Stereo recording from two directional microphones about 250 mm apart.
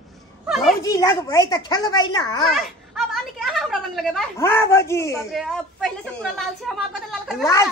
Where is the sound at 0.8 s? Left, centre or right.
Centre.